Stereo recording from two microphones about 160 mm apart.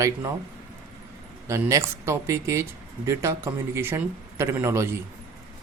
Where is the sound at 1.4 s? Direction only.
20° right (ahead or behind).